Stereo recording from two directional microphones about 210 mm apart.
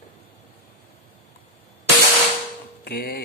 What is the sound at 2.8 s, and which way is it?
Speech, 45° left (ahead or behind).